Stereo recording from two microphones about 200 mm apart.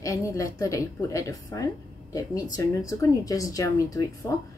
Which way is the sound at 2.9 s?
15° left (ahead or behind).